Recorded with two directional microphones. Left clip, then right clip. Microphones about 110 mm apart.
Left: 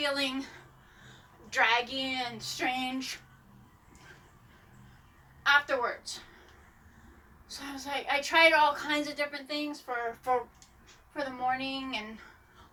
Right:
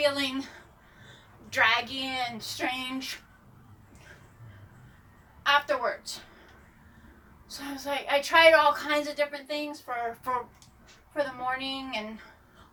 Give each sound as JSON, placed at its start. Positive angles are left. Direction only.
{"t": 0.0, "sound": "a woman's voice", "side_deg": -30}
{"t": 1.5, "sound": "a woman's voice", "side_deg": -30}
{"t": 5.4, "sound": "a woman's voice", "side_deg": -30}
{"t": 7.4, "sound": "a woman's voice", "side_deg": -30}
{"t": 11.1, "sound": "a woman's voice", "side_deg": -30}